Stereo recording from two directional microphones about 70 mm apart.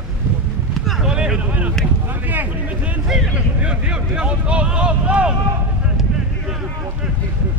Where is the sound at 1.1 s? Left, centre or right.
Centre.